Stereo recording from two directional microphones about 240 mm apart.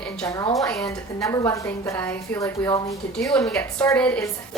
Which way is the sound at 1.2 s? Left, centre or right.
Centre.